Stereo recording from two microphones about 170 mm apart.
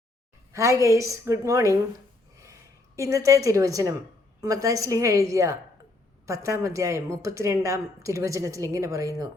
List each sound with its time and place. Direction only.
0.5 s a woman's voice: 20° right (ahead or behind)